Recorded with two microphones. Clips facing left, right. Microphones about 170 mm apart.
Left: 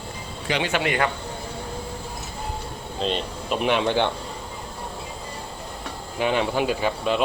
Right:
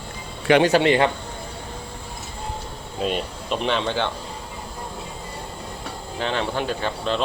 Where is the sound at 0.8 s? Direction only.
25° right (ahead or behind).